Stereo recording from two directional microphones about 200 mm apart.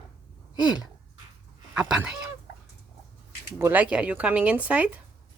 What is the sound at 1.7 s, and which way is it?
Speech, 5° right (ahead or behind).